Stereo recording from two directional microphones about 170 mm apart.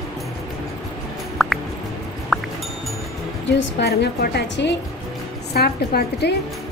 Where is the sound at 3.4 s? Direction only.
90° left.